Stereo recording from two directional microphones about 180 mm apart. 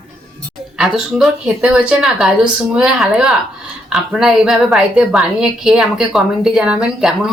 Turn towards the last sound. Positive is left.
turn(degrees=-5)  # may be behind; listen again after turning